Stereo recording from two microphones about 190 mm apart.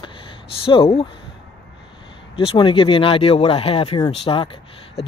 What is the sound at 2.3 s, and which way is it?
Speech, 25° left (ahead or behind).